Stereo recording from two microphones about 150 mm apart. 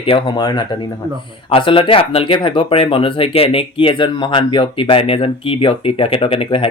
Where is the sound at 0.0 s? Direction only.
35° left (ahead or behind).